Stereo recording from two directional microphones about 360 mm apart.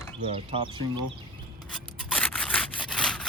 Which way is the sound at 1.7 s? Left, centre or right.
Centre.